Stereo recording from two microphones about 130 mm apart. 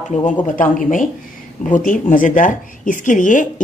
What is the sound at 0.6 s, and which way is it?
Speech, 90° left.